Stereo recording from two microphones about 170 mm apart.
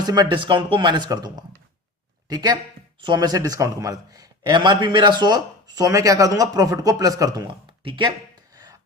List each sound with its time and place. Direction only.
0.0 s a man's voice: 25° right (ahead or behind)